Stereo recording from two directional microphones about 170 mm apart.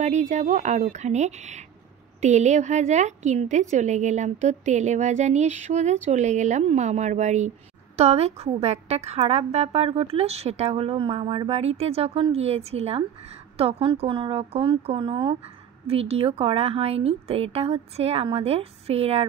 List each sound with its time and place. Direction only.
0.0 s a woman's voice: 45° right (ahead or behind)